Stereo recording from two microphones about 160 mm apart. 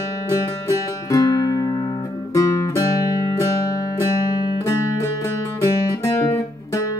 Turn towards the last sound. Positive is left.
turn(degrees=20)  # may be behind; listen again after turning